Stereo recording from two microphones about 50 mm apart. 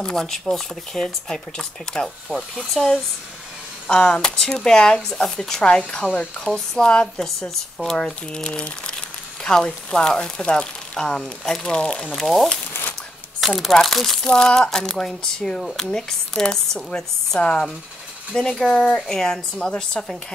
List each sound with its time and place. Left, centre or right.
0.0 s speech: centre
2.5 s chopping: centre
3.9 s speech: centre
12.2 s chopping: centre
14.2 s speech: centre